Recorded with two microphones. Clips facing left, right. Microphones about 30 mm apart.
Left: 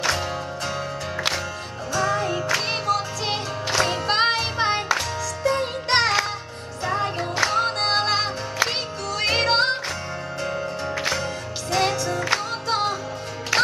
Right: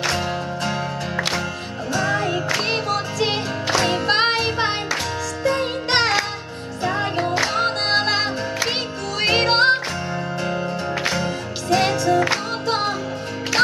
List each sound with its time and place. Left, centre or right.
1.9 s music: centre
11.7 s music: centre